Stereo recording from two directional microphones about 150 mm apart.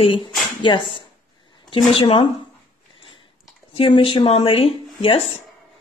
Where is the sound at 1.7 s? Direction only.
35° left (ahead or behind).